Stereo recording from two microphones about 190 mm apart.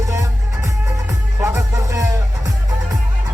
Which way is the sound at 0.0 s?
15° right (ahead or behind).